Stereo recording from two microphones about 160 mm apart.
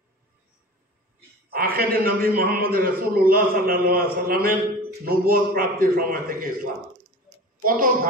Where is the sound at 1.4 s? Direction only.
70° right (ahead or behind).